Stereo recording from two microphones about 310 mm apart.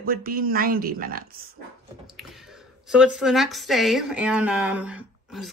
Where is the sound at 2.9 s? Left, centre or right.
Centre.